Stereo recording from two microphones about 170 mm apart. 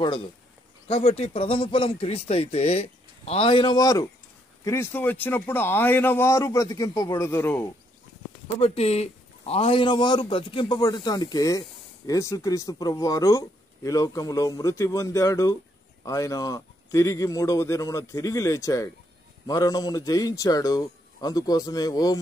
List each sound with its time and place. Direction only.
0.8 s a man's voice: 35° left (ahead or behind); by 7.6 s 15° left (ahead or behind)
8.5 s speech: 40° left (ahead or behind); by 22.2 s 20° left (ahead or behind)